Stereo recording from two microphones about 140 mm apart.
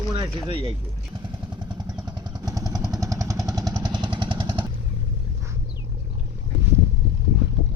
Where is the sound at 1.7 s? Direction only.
30° right (ahead or behind).